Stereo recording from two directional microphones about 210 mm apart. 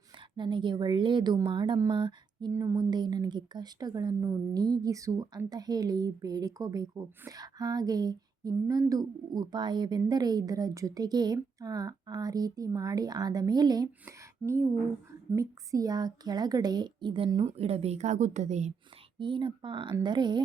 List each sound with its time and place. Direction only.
0.3 s a woman's voice: 20° right (ahead or behind)
19.2 s a woman's voice: 25° right (ahead or behind)